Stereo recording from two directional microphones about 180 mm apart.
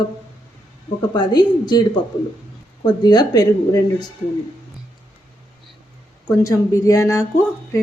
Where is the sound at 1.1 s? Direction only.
25° left (ahead or behind).